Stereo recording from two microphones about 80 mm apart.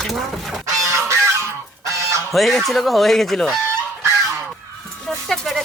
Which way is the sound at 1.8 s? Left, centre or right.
Right.